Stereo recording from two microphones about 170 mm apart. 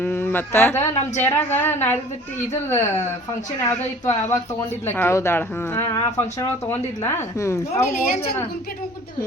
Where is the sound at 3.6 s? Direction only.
15° left (ahead or behind).